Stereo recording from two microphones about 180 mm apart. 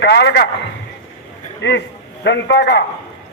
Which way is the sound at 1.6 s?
75° left (ahead or behind).